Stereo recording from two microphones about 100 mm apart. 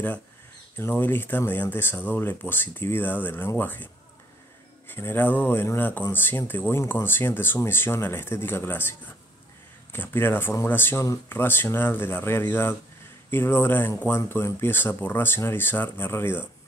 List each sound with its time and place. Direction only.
0.7 s speech: 20° left (ahead or behind)